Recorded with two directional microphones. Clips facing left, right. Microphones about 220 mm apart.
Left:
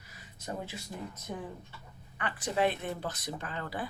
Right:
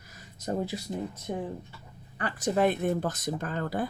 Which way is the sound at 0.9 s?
25° right (ahead or behind).